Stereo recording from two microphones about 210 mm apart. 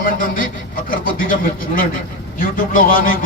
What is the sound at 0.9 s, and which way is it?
Speech, 40° left (ahead or behind).